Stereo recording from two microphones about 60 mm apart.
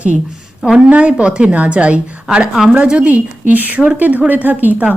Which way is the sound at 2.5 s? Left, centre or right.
Centre.